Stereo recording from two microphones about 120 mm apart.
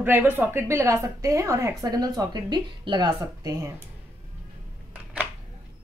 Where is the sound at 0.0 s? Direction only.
15° right (ahead or behind); by 3.7 s 35° right (ahead or behind).